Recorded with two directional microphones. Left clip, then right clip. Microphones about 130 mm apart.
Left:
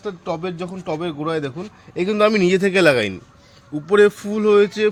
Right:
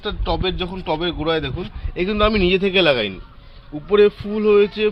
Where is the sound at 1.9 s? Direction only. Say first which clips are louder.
Left 1 dB; 90° left.